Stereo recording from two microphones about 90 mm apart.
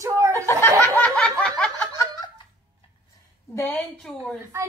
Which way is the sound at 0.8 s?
15° left (ahead or behind).